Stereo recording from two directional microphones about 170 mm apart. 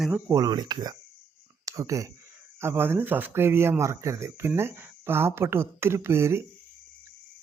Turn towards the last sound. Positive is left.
turn(degrees=-15)  # may be behind; listen again after turning